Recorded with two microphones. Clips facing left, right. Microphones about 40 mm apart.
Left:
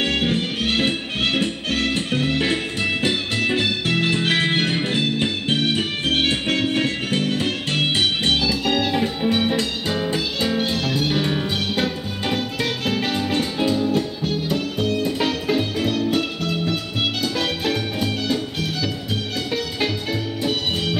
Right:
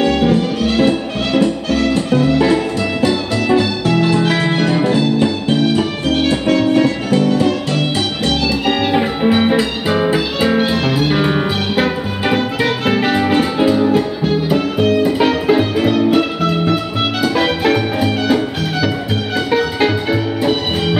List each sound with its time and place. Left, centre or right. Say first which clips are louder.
0.0 s music: right 8 dB; left
8.6 s music: right 6 dB; centre
8.9 s music: right 7 dB; right
10.5 s music: right 7 dB; centre